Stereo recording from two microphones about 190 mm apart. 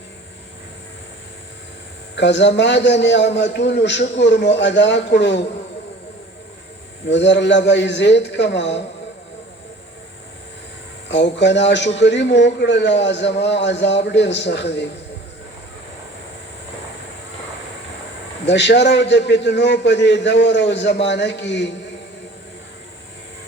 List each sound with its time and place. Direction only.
2.1 s a man's voice: 70° left (ahead or behind)
7.1 s a man's voice: 70° left (ahead or behind)
11.1 s a man's voice: 65° left (ahead or behind)
18.4 s a man's voice: 65° left (ahead or behind)